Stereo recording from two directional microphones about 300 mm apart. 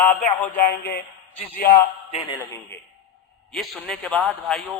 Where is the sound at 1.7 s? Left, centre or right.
Centre.